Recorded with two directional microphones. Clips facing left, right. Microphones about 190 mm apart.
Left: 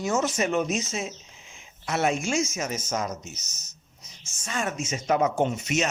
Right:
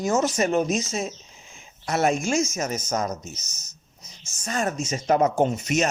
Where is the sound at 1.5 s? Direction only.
40° right (ahead or behind).